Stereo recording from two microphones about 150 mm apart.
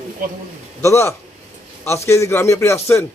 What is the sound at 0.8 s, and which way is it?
A man's voice, 20° left (ahead or behind).